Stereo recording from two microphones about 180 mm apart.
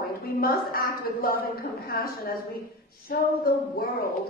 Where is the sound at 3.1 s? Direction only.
55° left (ahead or behind).